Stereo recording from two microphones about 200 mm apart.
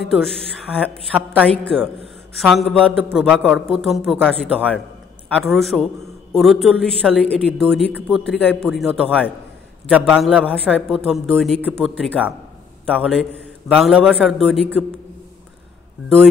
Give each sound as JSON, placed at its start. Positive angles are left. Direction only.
{"t": 0.0, "sound": "a woman's voice", "side_deg": 0}